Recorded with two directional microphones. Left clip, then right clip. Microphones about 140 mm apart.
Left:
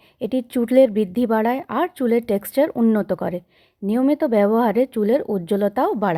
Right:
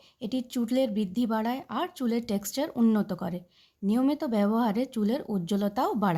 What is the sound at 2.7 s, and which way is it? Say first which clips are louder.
Speech: left 7 dB; 25° left (ahead or behind).